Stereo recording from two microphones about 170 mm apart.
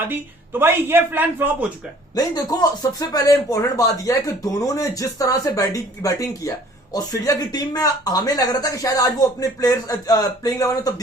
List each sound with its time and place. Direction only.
0.1 s speech: 15° right (ahead or behind)
2.1 s speech: 20° left (ahead or behind)